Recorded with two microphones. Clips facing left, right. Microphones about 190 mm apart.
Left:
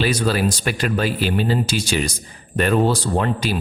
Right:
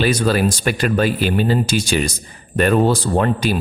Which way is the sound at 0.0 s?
50° right (ahead or behind).